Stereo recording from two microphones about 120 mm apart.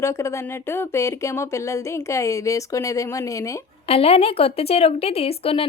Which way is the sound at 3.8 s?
55° left (ahead or behind).